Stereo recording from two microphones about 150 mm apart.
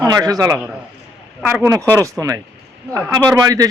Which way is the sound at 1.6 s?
20° right (ahead or behind).